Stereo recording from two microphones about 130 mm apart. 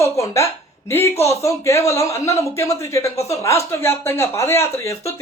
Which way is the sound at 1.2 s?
20° left (ahead or behind).